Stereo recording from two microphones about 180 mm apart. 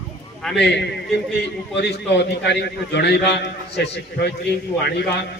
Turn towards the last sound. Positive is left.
turn(degrees=65)  # may be behind; listen again after turning